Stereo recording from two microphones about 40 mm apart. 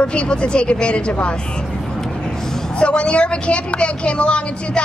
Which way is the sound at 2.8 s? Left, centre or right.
Left.